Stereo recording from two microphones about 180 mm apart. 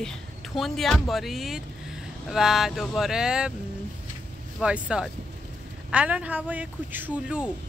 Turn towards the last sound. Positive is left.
turn(degrees=-5)  # may be behind; listen again after turning